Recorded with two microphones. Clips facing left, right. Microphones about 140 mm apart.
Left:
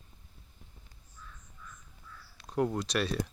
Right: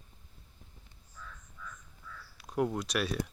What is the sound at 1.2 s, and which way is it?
Crow, 90° right.